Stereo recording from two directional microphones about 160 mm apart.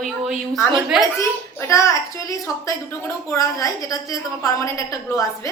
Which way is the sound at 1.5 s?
20° left (ahead or behind).